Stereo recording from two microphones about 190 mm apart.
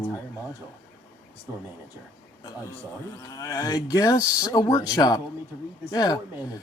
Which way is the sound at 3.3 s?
15° left (ahead or behind).